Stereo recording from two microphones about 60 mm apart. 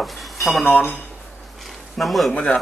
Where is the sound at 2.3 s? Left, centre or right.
Left.